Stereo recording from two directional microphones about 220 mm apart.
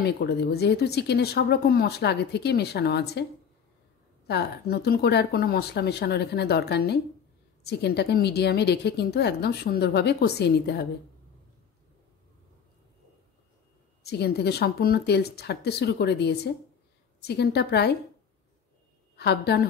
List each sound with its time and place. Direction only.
0.2 s a woman's voice: 45° left (ahead or behind)
4.3 s a woman's voice: 50° left (ahead or behind)
14.0 s a woman's voice: 45° left (ahead or behind)
19.1 s a woman's voice: 50° left (ahead or behind)